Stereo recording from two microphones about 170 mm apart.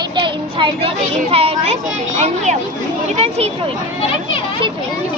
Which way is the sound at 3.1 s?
40° right (ahead or behind).